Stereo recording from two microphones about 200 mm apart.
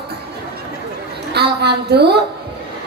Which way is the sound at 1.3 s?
55° right (ahead or behind).